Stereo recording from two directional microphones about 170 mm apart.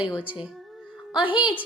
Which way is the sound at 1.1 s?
30° left (ahead or behind).